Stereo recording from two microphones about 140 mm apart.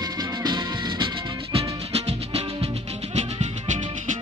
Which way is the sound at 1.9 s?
45° right (ahead or behind).